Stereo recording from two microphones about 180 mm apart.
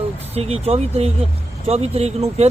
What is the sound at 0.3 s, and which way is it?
A man's voice, 35° right (ahead or behind).